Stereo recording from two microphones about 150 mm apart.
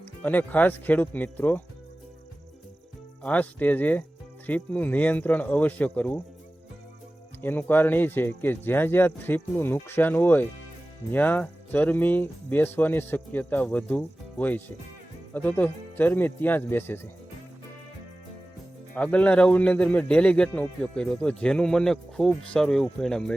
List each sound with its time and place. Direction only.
0.0 s speech: 10° left (ahead or behind)
3.2 s speech: 10° left (ahead or behind)
7.4 s speech: 15° left (ahead or behind)
18.9 s speech: 10° left (ahead or behind)